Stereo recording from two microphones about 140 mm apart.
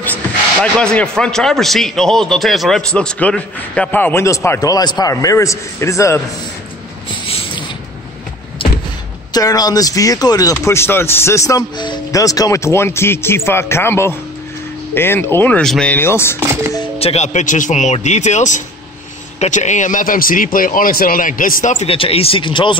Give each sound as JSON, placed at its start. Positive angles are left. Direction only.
{"t": 0.1, "sound": "speech", "side_deg": 5}
{"t": 7.2, "sound": "a sound", "side_deg": 45}
{"t": 8.6, "sound": "door", "side_deg": 40}
{"t": 9.3, "sound": "speech", "side_deg": 25}
{"t": 16.3, "sound": "speech", "side_deg": -20}
{"t": 17.0, "sound": "a man's voice", "side_deg": 50}
{"t": 21.8, "sound": "speech", "side_deg": 40}